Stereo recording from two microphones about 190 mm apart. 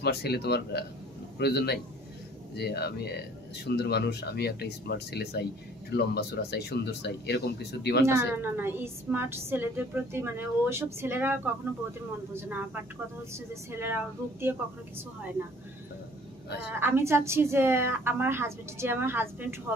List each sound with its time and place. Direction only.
0.0 s speech: 60° left (ahead or behind)
8.0 s a woman's voice: 15° right (ahead or behind)
16.8 s a woman's voice: 10° right (ahead or behind)